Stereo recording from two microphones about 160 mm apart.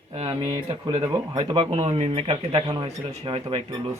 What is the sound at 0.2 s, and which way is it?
Speech, 35° right (ahead or behind).